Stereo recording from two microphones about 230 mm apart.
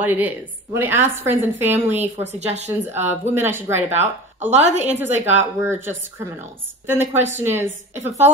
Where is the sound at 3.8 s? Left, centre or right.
Right.